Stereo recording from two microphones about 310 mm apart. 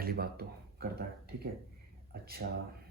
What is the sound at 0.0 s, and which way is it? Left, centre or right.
Speech, right.